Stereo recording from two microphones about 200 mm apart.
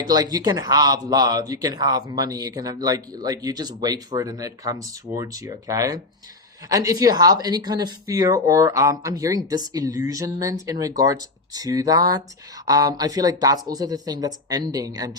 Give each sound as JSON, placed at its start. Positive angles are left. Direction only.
{"t": 0.1, "sound": "speech", "side_deg": -20}